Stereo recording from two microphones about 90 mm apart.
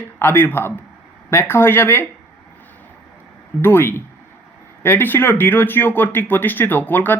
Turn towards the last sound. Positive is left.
turn(degrees=20)  # may be behind; listen again after turning